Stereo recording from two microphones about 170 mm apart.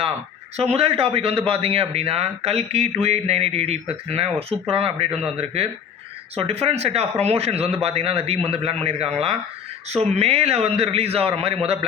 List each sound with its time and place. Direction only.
0.5 s a man's voice: 35° right (ahead or behind)
6.3 s a man's voice: 35° right (ahead or behind)